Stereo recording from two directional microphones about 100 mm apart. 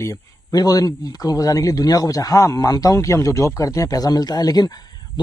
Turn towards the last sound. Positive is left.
turn(degrees=40)  # may be behind; listen again after turning